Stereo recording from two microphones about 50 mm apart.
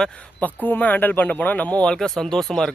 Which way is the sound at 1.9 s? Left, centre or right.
Centre.